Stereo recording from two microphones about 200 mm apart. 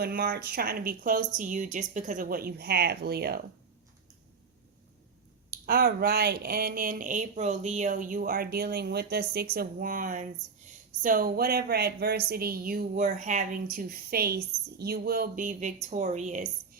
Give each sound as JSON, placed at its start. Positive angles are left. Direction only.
{"t": 0.0, "sound": "speech", "side_deg": -45}
{"t": 5.5, "sound": "speech", "side_deg": -50}